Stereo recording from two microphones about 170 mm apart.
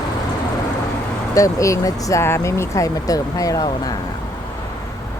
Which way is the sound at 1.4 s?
20° left (ahead or behind).